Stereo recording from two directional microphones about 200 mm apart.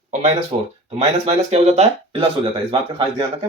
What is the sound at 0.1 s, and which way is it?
Speech, 35° right (ahead or behind).